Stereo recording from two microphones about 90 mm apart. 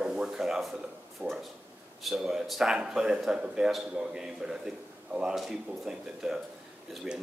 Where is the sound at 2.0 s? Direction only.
5° right (ahead or behind).